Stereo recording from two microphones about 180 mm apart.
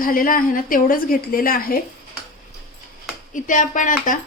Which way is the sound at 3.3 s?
45° left (ahead or behind).